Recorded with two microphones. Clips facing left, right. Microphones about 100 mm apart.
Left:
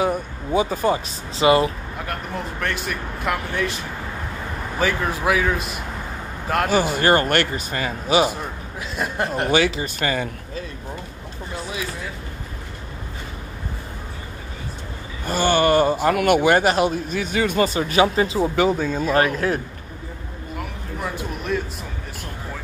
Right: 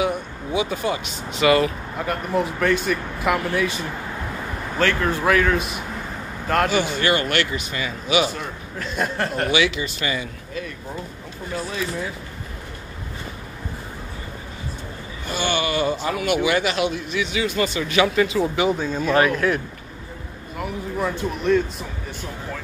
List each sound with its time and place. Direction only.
0.0 s speech: 40° left (ahead or behind)
2.0 s speech: 5° right (ahead or behind)
4.7 s speech: 10° left (ahead or behind)
6.7 s speech: 45° left (ahead or behind)
8.7 s speech: 5° left (ahead or behind)
9.1 s speech: 15° left (ahead or behind)
9.5 s speech: 40° left (ahead or behind)
15.2 s speech: 45° left (ahead or behind)
18.8 s speech: 50° left (ahead or behind)
19.4 s speech: 35° left (ahead or behind)
20.5 s a sound: 5° left (ahead or behind)